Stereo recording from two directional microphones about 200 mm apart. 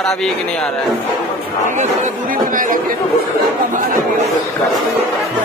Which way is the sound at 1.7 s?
35° right (ahead or behind).